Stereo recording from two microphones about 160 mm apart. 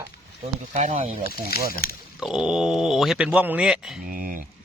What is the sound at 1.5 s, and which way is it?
Speech, 75° left (ahead or behind).